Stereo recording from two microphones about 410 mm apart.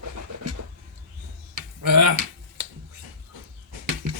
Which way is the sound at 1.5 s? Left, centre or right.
Right.